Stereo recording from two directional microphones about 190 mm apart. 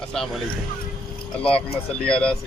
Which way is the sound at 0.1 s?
5° left (ahead or behind).